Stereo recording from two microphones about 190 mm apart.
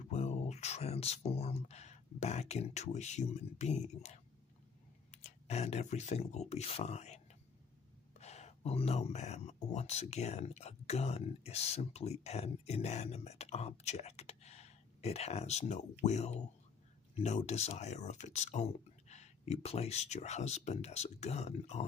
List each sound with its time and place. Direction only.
0.1 s a sound: 35° left (ahead or behind)
5.1 s speech: 35° left (ahead or behind)
8.2 s speech: 35° left (ahead or behind)